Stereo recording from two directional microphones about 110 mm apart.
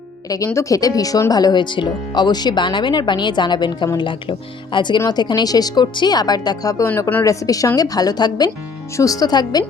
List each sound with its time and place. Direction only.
0.3 s speech: 30° left (ahead or behind)